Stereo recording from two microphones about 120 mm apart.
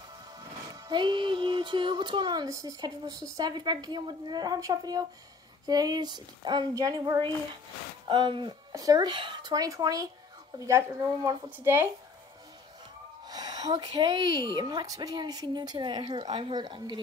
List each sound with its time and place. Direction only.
0.7 s a woman's voice: 35° right (ahead or behind)
13.3 s a sound: 30° right (ahead or behind)
13.7 s speech: 45° right (ahead or behind)